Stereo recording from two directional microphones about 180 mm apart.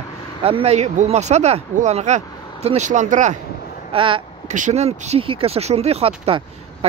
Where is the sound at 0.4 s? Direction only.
30° right (ahead or behind).